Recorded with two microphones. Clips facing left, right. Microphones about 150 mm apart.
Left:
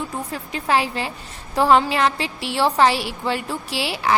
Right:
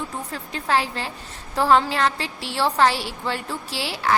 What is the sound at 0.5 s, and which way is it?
A woman's voice, 15° left (ahead or behind).